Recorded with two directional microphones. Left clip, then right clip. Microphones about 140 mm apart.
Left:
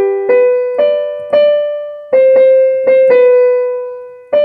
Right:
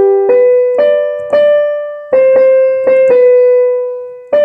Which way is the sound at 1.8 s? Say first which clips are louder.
Even; 40° right (ahead or behind).